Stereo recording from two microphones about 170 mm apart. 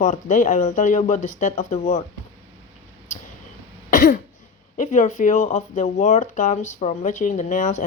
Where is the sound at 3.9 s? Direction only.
50° left (ahead or behind).